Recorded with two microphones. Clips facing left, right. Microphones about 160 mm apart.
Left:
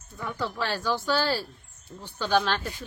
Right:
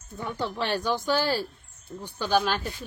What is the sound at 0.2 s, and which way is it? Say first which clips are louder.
Speech: right 1 dB; 25° right (ahead or behind).